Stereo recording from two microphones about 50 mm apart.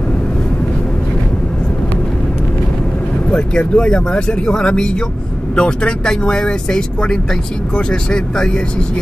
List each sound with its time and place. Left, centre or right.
3.3 s speech: centre